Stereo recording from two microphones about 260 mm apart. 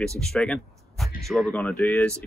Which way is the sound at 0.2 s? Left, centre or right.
Centre.